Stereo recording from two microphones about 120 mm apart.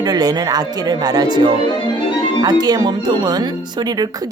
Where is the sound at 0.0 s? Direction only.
35° right (ahead or behind).